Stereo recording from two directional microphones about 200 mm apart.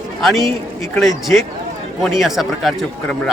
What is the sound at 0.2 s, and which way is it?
A man's voice, centre (ahead or behind).